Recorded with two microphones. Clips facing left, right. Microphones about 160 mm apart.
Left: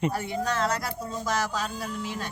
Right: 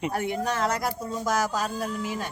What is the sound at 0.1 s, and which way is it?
Speech, 55° right (ahead or behind).